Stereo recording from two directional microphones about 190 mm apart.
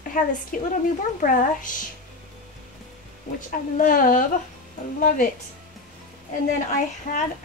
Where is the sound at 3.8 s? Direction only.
45° left (ahead or behind).